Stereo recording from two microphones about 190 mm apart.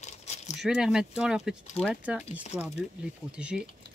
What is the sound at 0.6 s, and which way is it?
Speech, 5° right (ahead or behind).